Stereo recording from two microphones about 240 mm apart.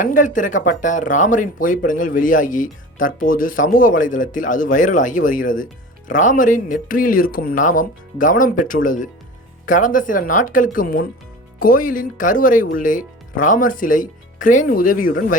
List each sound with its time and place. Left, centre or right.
0.0 s speech: left